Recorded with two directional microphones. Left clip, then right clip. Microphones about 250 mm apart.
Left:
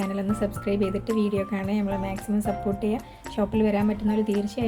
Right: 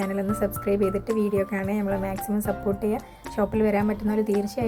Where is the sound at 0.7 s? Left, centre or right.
Right.